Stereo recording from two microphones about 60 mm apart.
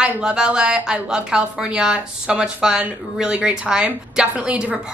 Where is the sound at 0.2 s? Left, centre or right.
Centre.